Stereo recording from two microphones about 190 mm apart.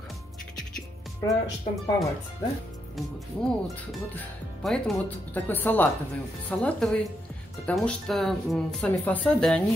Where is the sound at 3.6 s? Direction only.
5° left (ahead or behind).